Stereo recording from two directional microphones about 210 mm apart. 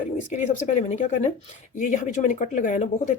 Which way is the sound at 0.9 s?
35° left (ahead or behind).